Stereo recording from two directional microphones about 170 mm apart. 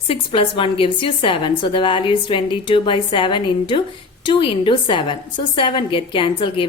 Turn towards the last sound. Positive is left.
turn(degrees=30)  # may be behind; listen again after turning